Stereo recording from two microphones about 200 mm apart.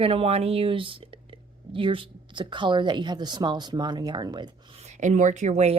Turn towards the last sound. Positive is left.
turn(degrees=-35)  # may be behind; listen again after turning